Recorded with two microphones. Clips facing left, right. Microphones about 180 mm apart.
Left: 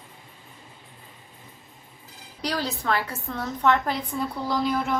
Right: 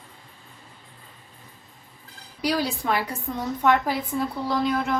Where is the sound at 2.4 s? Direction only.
10° right (ahead or behind).